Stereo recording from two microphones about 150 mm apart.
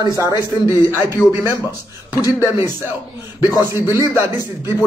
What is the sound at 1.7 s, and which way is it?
Speech, 25° left (ahead or behind).